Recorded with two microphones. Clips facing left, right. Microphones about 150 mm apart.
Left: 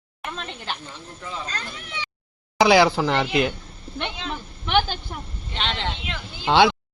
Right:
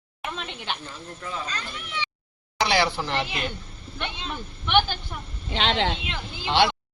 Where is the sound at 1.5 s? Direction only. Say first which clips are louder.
Left 1 dB; 45° left (ahead or behind).